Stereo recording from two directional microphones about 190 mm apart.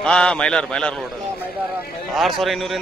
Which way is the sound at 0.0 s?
5° left (ahead or behind).